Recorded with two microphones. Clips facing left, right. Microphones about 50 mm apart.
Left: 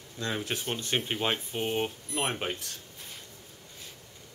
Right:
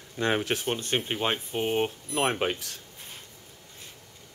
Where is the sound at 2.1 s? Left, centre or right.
Right.